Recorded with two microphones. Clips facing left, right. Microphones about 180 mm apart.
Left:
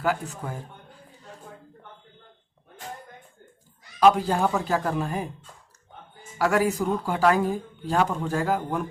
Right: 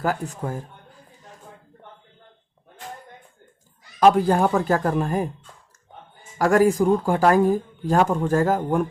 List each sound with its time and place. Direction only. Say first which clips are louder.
0.0 s speech: right 2 dB; 40° right (ahead or behind)
4.0 s speech: right 3 dB; 50° right (ahead or behind)
6.4 s speech: right 6 dB; 45° right (ahead or behind)